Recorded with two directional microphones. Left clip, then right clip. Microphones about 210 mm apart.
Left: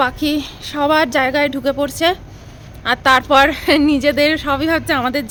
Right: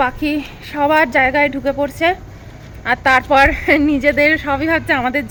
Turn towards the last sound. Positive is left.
turn(degrees=15)  # may be behind; listen again after turning